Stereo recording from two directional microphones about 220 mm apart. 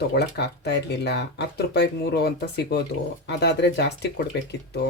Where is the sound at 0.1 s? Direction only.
50° left (ahead or behind).